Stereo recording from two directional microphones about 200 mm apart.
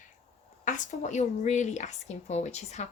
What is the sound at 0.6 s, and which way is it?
Speech, 40° left (ahead or behind).